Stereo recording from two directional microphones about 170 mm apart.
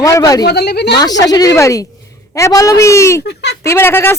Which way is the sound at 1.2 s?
20° left (ahead or behind).